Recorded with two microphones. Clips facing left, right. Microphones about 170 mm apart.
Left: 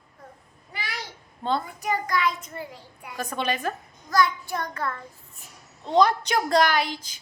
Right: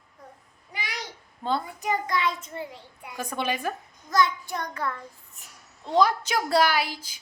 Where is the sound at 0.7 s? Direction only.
15° right (ahead or behind).